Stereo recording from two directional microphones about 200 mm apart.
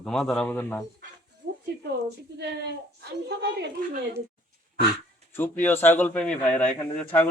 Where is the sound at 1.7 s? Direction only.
55° right (ahead or behind).